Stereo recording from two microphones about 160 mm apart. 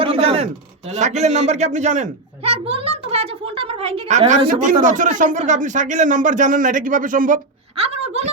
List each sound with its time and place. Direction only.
0.0 s a man's voice: 35° right (ahead or behind)
4.6 s speech: 55° right (ahead or behind)
7.8 s a woman's voice: 40° right (ahead or behind)